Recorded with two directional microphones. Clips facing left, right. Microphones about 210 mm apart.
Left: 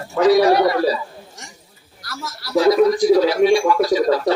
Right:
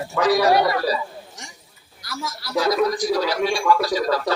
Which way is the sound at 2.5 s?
25° left (ahead or behind).